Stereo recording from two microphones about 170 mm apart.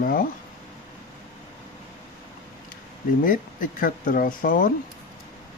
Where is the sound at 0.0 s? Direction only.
55° left (ahead or behind).